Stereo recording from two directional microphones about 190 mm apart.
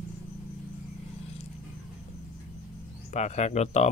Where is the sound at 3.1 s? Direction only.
40° left (ahead or behind).